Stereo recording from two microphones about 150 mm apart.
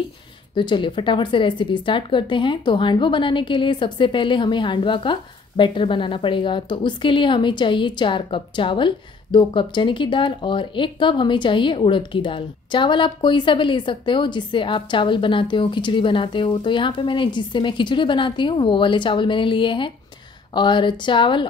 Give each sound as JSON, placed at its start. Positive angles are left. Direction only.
{"t": 0.6, "sound": "speech", "side_deg": 30}